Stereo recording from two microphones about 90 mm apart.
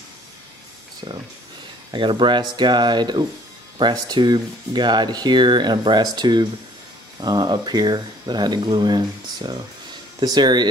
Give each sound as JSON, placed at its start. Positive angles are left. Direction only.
{"t": 1.9, "sound": "speech", "side_deg": -65}